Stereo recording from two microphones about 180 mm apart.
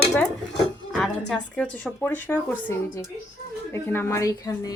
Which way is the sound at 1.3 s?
5° left (ahead or behind).